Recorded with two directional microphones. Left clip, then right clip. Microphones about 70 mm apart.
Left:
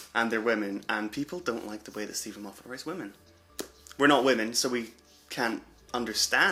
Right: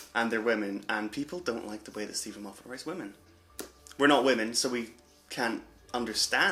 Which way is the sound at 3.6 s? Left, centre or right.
Left.